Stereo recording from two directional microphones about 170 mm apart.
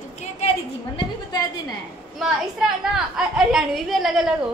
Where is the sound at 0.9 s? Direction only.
25° left (ahead or behind).